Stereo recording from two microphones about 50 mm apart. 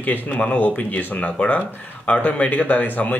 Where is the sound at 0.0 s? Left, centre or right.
Left.